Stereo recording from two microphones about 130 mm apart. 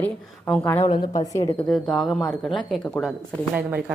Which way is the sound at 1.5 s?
5° left (ahead or behind).